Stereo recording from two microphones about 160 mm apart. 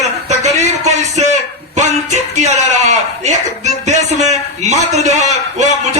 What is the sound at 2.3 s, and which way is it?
Music, 45° right (ahead or behind).